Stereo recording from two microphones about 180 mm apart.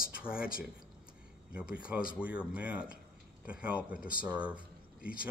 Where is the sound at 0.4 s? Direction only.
55° left (ahead or behind).